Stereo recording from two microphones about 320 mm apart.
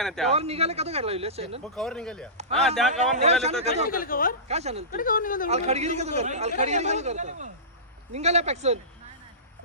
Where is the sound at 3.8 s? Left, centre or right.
Left.